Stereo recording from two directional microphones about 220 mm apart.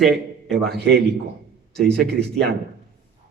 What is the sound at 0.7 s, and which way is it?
Speech, 45° right (ahead or behind).